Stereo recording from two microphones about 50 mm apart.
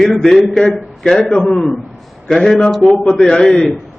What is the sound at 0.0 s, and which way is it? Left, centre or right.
A man's voice, centre.